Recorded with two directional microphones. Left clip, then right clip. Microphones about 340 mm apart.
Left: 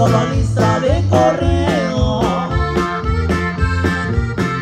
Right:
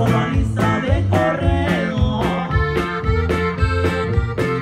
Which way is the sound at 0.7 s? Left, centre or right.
Centre.